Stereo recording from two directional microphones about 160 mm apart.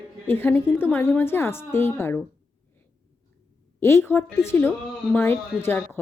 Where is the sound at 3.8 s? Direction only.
15° left (ahead or behind).